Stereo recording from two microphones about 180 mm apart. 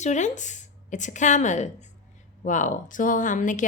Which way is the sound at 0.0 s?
40° left (ahead or behind).